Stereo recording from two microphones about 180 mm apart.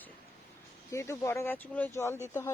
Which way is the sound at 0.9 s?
15° left (ahead or behind).